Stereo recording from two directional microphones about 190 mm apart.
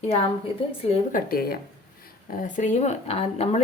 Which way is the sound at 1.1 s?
50° left (ahead or behind).